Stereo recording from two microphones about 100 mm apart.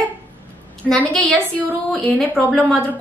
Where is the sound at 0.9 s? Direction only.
10° left (ahead or behind).